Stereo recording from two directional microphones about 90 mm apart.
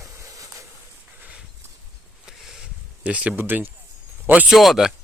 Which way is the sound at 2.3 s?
5° right (ahead or behind).